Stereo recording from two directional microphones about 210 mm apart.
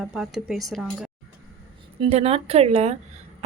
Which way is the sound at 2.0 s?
30° right (ahead or behind).